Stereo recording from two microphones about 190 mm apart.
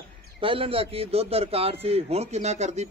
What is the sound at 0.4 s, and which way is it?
A man's voice, 30° right (ahead or behind).